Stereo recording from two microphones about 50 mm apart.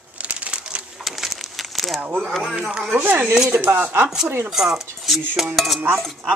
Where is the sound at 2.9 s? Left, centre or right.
Right.